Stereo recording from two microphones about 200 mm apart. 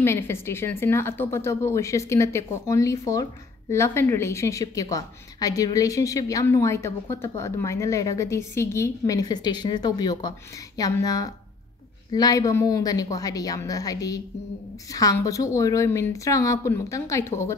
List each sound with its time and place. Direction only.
0.0 s a woman's voice: 10° left (ahead or behind)